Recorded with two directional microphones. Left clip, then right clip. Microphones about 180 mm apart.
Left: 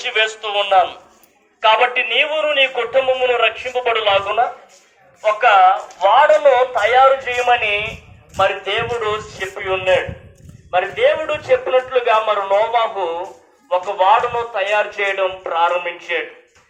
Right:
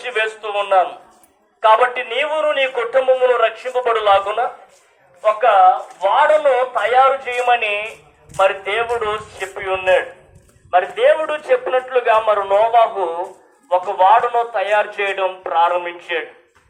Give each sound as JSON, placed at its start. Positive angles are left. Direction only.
{"t": 0.0, "sound": "a man's voice", "side_deg": -50}
{"t": 5.2, "sound": "speech", "side_deg": 30}
{"t": 6.0, "sound": "a man's voice", "side_deg": 55}
{"t": 8.4, "sound": "a man's voice", "side_deg": 20}